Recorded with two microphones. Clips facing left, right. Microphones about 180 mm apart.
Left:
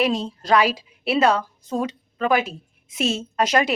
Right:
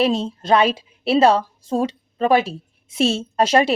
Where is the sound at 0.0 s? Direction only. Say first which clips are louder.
Right 3 dB; 25° right (ahead or behind).